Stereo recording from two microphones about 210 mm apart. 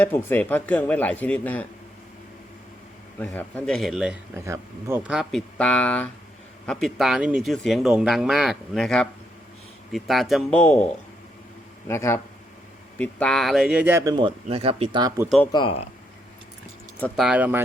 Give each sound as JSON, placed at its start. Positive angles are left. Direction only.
{"t": 0.0, "sound": "speech", "side_deg": 10}
{"t": 3.2, "sound": "a man's voice", "side_deg": 5}
{"t": 11.9, "sound": "speech", "side_deg": 10}
{"t": 15.5, "sound": "speech", "side_deg": 25}
{"t": 17.0, "sound": "a man's voice", "side_deg": 0}